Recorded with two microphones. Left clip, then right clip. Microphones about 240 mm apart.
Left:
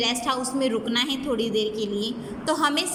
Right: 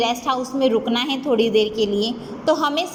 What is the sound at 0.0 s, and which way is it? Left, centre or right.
A woman's voice, centre.